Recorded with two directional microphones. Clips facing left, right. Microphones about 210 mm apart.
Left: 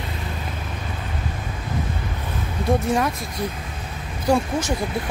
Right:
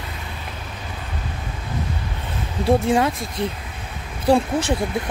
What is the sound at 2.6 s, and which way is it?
Speech, 25° right (ahead or behind).